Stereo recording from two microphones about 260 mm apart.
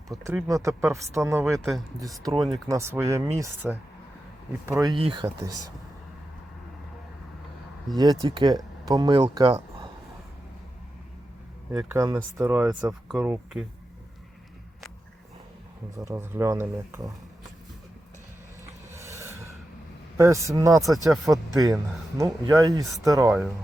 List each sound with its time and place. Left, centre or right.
0.1 s speech: centre
1.5 s speech: centre
2.6 s speech: centre
7.9 s speech: centre
11.7 s speech: centre
16.0 s speech: centre
18.6 s a sound: centre
20.1 s speech: centre